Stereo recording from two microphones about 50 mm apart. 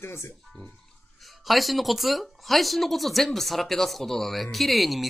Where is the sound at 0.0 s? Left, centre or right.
Left.